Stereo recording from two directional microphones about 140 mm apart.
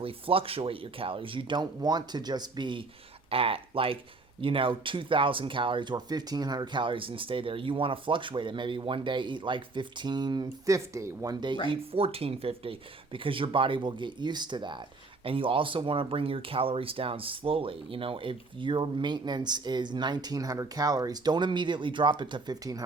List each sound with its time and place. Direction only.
0.0 s speech: 40° right (ahead or behind)
11.7 s speech: 40° right (ahead or behind)